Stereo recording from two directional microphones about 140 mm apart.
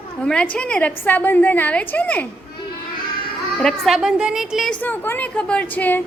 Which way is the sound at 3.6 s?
Centre (ahead or behind).